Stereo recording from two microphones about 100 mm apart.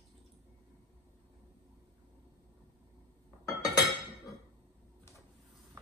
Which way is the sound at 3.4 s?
40° left (ahead or behind).